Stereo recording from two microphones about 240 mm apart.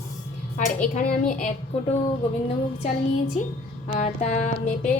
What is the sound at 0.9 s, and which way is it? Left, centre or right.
Speech, left.